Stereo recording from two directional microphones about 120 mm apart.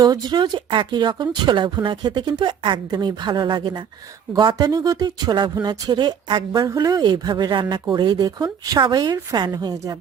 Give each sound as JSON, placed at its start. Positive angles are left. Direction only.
{"t": 0.0, "sound": "speech", "side_deg": -35}